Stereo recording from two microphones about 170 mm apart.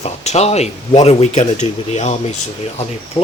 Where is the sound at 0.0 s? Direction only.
40° left (ahead or behind).